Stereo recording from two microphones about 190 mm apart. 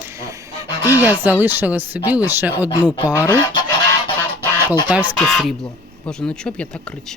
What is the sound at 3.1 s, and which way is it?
Speech, 15° left (ahead or behind).